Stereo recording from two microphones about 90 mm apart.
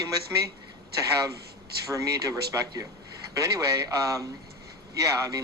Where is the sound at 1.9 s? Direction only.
40° right (ahead or behind).